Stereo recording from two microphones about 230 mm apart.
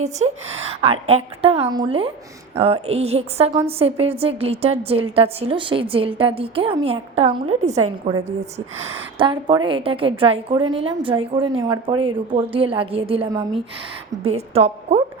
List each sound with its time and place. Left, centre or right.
0.0 s a woman's voice: right
14.3 s a woman's voice: right